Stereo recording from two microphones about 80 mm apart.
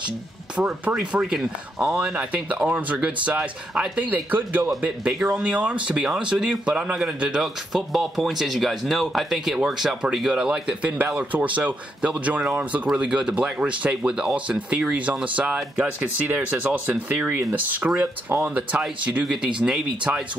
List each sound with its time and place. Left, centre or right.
0.6 s speech: centre
7.4 s speech: centre
19.2 s speech: centre
20.1 s speech: centre